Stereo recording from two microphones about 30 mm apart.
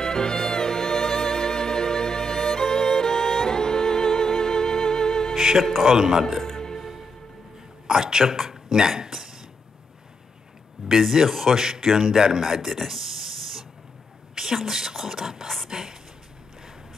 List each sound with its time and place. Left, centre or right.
0.0 s music: left
5.3 s music: centre
6.4 s music: centre
7.8 s speech: centre
10.9 s speech: centre
11.5 s speech: centre
12.6 s spray: centre
14.3 s a woman's voice: centre